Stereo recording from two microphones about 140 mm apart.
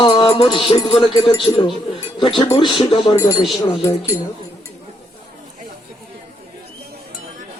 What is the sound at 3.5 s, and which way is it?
Speech, 20° left (ahead or behind).